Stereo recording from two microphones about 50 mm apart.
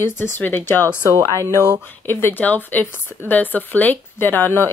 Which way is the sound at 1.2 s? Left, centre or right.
Left.